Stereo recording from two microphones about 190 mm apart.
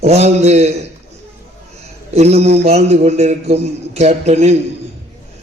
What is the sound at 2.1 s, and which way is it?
A man's voice, 35° right (ahead or behind).